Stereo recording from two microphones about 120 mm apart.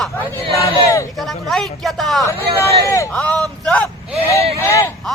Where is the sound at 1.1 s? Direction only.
Centre (ahead or behind).